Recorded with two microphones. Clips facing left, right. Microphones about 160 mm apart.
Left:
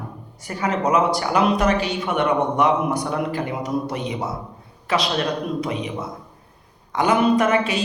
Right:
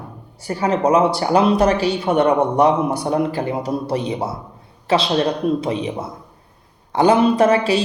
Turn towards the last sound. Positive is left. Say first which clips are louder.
# right 3 dB
turn(degrees=-30)  # may be behind; listen again after turning